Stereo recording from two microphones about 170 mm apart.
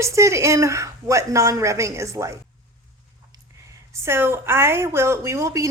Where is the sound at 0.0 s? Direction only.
15° right (ahead or behind).